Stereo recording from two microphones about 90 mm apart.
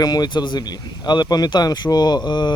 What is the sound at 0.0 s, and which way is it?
Speech, 50° left (ahead or behind).